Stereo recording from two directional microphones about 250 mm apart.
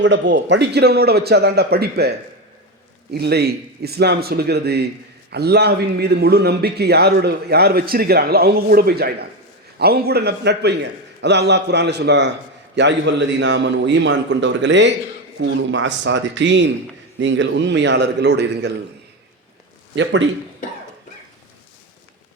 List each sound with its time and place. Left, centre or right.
0.0 s a man's voice: right